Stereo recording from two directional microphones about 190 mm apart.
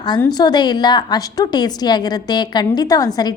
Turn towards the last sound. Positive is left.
turn(degrees=20)  # may be behind; listen again after turning